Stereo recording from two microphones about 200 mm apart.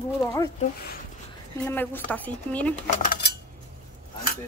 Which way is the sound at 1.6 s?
10° left (ahead or behind).